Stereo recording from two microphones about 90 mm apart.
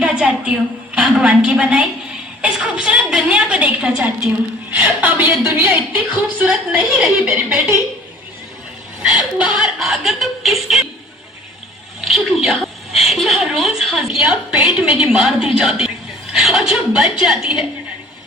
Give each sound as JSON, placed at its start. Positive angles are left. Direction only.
{"t": 0.0, "sound": "a woman's voice", "side_deg": -10}
{"t": 6.1, "sound": "a woman's voice", "side_deg": -10}
{"t": 7.3, "sound": "a woman's voice", "side_deg": -25}
{"t": 9.0, "sound": "speech", "side_deg": -10}
{"t": 11.9, "sound": "a woman's voice", "side_deg": -5}